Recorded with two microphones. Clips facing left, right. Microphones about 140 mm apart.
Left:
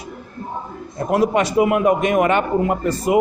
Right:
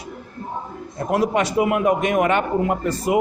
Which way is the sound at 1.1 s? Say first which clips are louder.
Left 3 dB; 25° left (ahead or behind).